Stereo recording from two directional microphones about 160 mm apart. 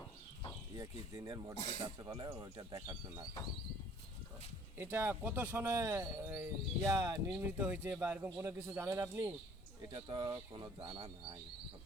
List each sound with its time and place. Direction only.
1.1 s speech: 25° right (ahead or behind)
4.8 s speech: 15° right (ahead or behind)
7.3 s speech: 5° right (ahead or behind)
9.9 s speech: 30° right (ahead or behind)